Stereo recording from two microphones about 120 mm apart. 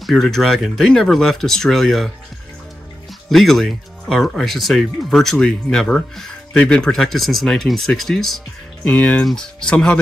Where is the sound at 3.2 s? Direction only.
Centre (ahead or behind).